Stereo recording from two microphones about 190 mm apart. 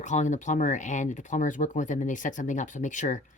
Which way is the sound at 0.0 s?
40° left (ahead or behind).